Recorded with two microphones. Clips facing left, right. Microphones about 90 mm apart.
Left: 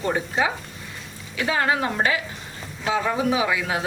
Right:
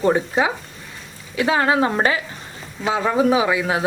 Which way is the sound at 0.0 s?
40° right (ahead or behind).